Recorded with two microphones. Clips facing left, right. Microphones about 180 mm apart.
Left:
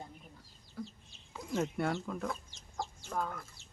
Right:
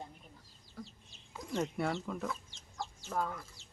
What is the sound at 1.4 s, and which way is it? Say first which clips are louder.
Speech: left 1 dB; centre (ahead or behind).